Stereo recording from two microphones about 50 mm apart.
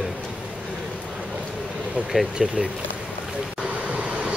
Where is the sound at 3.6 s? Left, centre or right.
Right.